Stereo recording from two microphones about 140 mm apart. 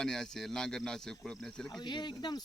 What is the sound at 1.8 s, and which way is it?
Speech, 30° left (ahead or behind).